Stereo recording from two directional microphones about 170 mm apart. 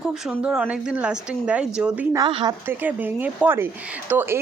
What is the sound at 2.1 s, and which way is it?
Speech, 25° right (ahead or behind).